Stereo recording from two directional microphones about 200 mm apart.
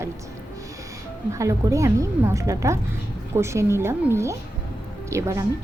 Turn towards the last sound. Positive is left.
turn(degrees=-15)  # may be behind; listen again after turning